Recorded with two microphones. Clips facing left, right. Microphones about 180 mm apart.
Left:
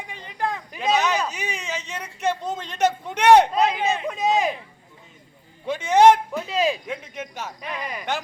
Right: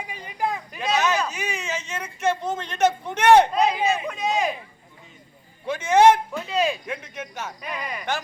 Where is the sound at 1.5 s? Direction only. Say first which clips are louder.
Right 1 dB; 15° left (ahead or behind).